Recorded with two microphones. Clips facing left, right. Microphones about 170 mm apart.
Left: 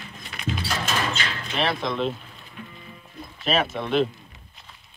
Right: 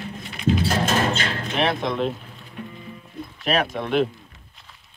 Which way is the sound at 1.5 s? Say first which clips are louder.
Right 2 dB; 15° right (ahead or behind).